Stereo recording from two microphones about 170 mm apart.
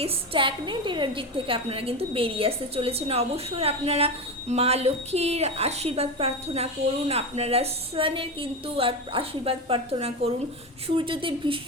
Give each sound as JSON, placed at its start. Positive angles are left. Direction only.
{"t": 0.0, "sound": "a woman's voice", "side_deg": -30}